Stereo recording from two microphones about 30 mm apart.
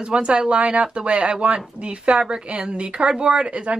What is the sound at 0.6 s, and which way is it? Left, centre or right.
Speech, right.